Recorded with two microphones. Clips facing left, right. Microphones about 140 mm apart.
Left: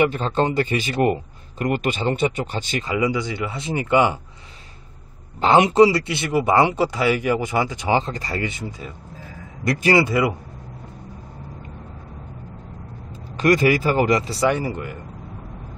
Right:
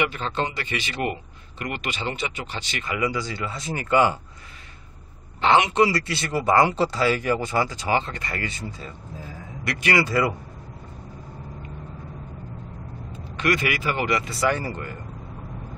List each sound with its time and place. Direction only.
0.1 s a man's voice: 45° left (ahead or behind)
2.8 s speech: 25° left (ahead or behind)
5.4 s speech: 40° left (ahead or behind)
5.9 s speech: 20° left (ahead or behind)
8.0 s speech: 35° left (ahead or behind)
8.4 s speech: 15° left (ahead or behind)
9.7 s speech: 30° left (ahead or behind)
10.0 s speech: 15° left (ahead or behind)
13.1 s speech: 40° left (ahead or behind)
14.4 s speech: 15° left (ahead or behind)